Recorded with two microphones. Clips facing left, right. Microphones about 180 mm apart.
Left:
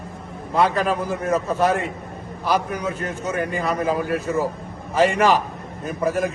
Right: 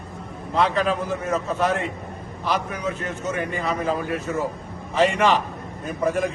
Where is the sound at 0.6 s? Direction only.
10° left (ahead or behind).